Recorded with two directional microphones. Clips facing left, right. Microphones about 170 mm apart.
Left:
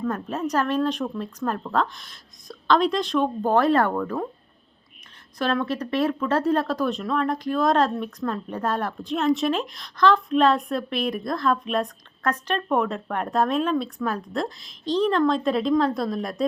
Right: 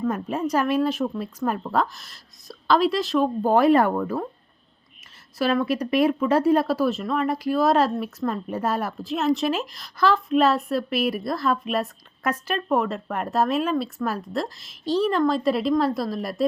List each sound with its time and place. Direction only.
0.0 s a woman's voice: 10° right (ahead or behind)
5.4 s speech: 5° right (ahead or behind)